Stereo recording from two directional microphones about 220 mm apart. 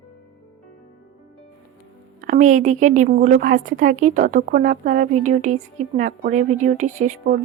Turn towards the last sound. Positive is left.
turn(degrees=-40)  # may be behind; listen again after turning